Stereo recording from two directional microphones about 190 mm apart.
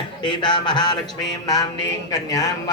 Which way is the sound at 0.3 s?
25° left (ahead or behind).